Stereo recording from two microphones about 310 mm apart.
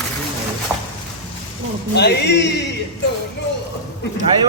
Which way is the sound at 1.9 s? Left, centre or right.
Left.